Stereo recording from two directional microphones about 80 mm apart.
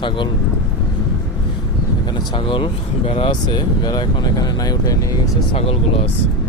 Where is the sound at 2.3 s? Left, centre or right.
Left.